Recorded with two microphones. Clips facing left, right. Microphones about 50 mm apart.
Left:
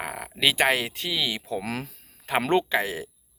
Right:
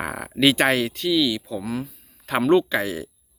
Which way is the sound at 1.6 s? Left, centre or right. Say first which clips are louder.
Right 3 dB; left.